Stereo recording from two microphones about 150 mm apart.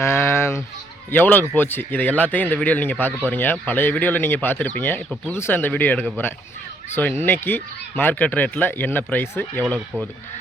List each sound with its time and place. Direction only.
0.0 s fowl: 15° left (ahead or behind)
1.1 s speech: 10° left (ahead or behind)